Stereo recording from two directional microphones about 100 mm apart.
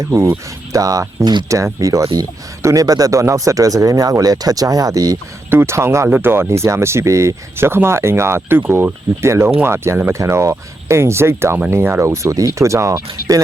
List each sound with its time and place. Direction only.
0.0 s speech: 30° right (ahead or behind)
5.5 s speech: 25° right (ahead or behind)